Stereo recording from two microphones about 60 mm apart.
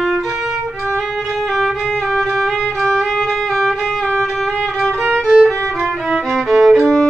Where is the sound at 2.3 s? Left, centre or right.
Centre.